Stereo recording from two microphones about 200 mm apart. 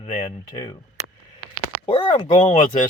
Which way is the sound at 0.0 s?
25° left (ahead or behind).